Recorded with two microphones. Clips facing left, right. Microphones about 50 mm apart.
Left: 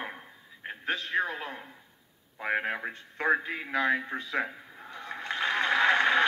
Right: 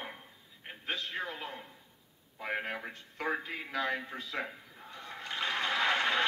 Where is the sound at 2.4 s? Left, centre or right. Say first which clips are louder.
Left 6 dB; left.